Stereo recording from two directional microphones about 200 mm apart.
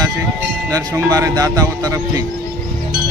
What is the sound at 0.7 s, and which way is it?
Speech, 20° right (ahead or behind).